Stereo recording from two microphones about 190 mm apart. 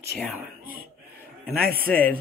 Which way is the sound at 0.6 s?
50° right (ahead or behind).